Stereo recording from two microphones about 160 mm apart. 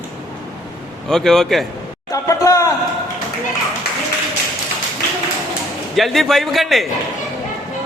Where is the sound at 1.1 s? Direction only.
Centre (ahead or behind).